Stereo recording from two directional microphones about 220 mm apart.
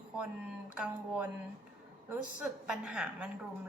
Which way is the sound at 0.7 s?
5° right (ahead or behind).